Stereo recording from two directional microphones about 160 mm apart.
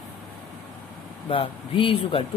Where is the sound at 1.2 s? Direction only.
35° left (ahead or behind).